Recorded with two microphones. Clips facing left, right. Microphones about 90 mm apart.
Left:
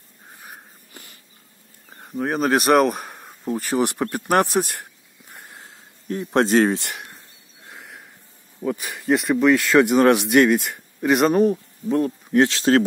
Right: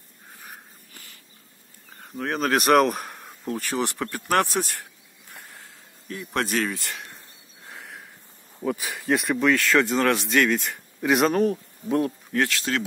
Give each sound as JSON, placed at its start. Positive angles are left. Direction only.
{"t": 2.0, "sound": "speech", "side_deg": 15}
{"t": 4.0, "sound": "a man's voice", "side_deg": 20}
{"t": 5.3, "sound": "a sound", "side_deg": 20}
{"t": 6.0, "sound": "a man's voice", "side_deg": 30}
{"t": 7.7, "sound": "a sound", "side_deg": 0}
{"t": 8.6, "sound": "speech", "side_deg": 0}
{"t": 9.8, "sound": "speech", "side_deg": 15}
{"t": 12.3, "sound": "a man's voice", "side_deg": 25}